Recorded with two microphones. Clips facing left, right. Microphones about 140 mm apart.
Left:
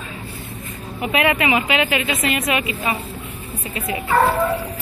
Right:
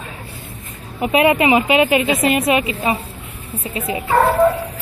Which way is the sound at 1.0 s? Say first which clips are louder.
Right 5 dB; 30° right (ahead or behind).